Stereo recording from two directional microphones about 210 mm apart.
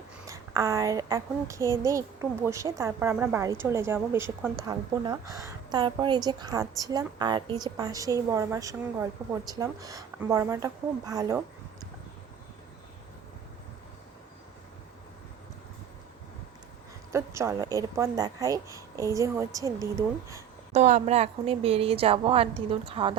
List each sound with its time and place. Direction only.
0.3 s a woman's voice: 15° right (ahead or behind)
17.1 s a woman's voice: 15° right (ahead or behind)
20.7 s a woman's voice: 35° right (ahead or behind)